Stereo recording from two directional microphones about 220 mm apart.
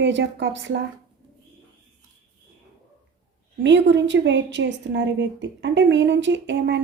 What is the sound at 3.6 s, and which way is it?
A woman's voice, 55° right (ahead or behind).